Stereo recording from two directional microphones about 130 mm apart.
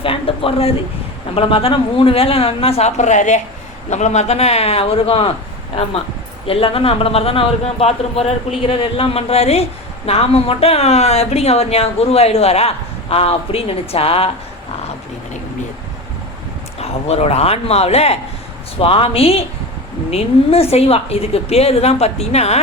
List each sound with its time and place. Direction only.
0.0 s a sound: 45° left (ahead or behind)
1.4 s speech: 45° left (ahead or behind)
6.5 s speech: 45° left (ahead or behind)
16.8 s speech: 55° left (ahead or behind)